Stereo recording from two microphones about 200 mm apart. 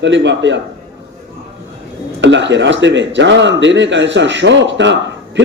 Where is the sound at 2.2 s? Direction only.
65° right (ahead or behind).